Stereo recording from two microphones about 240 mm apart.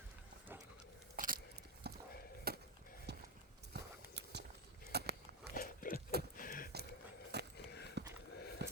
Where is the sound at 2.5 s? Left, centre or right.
Right.